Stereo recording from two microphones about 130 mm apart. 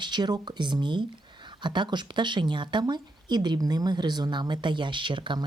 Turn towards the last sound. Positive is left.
turn(degrees=-40)  # may be behind; listen again after turning